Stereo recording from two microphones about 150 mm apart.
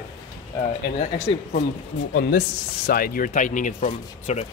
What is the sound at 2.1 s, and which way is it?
Speech, 90° left.